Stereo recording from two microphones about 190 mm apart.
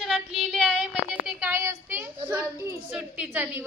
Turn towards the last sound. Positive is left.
turn(degrees=-10)  # may be behind; listen again after turning